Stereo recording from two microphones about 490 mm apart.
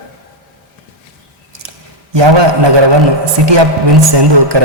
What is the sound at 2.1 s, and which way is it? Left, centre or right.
A man's voice, right.